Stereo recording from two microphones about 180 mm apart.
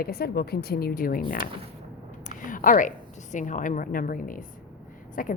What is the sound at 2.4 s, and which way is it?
A woman's voice, 50° left (ahead or behind).